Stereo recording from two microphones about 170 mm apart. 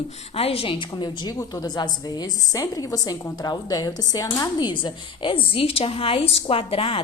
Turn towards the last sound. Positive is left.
turn(degrees=35)  # may be behind; listen again after turning